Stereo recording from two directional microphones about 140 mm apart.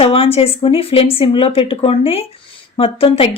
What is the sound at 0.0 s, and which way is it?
A woman's voice, 45° left (ahead or behind).